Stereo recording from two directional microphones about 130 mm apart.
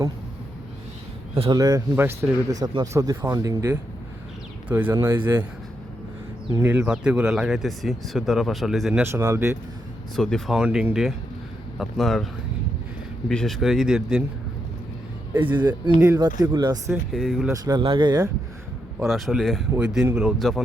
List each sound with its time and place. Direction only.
1.5 s speech: 30° right (ahead or behind)
4.7 s speech: 15° right (ahead or behind)
6.5 s speech: 20° right (ahead or behind)
6.8 s speech: 10° right (ahead or behind)
9.0 s speech: 20° right (ahead or behind)
10.2 s speech: 5° left (ahead or behind)
15.3 s speech: 15° right (ahead or behind)
15.5 s speech: 35° right (ahead or behind)
17.1 s speech: centre (ahead or behind)
17.5 s speech: 30° right (ahead or behind)
19.0 s speech: centre (ahead or behind)